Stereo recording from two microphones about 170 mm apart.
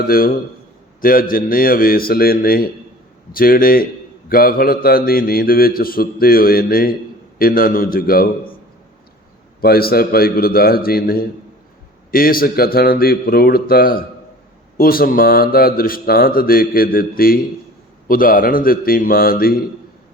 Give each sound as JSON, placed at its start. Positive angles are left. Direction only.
{"t": 0.1, "sound": "a man's voice", "side_deg": 60}
{"t": 9.6, "sound": "a man's voice", "side_deg": 60}